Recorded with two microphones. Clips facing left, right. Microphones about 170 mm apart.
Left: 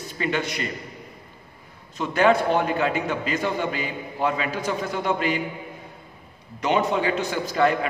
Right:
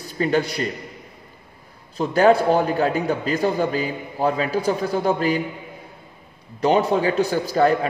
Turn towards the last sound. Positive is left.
turn(degrees=-35)  # may be behind; listen again after turning